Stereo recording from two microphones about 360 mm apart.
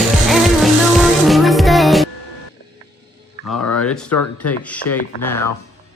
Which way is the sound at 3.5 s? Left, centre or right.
Left.